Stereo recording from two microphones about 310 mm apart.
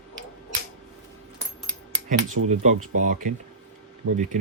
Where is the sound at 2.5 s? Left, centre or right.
Right.